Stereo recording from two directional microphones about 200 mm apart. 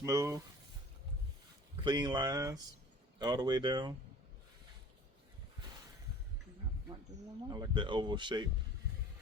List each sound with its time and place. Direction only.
0.0 s speech: 15° right (ahead or behind)
1.8 s speech: 20° right (ahead or behind)
7.5 s speech: 20° right (ahead or behind)